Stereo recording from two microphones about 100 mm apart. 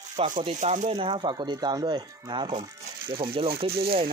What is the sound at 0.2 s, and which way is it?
Speech, 75° right (ahead or behind).